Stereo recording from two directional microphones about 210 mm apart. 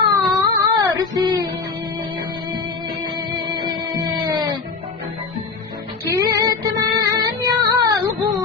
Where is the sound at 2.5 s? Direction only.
20° right (ahead or behind).